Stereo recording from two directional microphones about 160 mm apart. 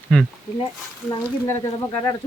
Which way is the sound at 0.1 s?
5° left (ahead or behind).